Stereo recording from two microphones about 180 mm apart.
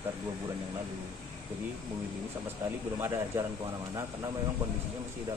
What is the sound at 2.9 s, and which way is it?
Speech, 15° right (ahead or behind).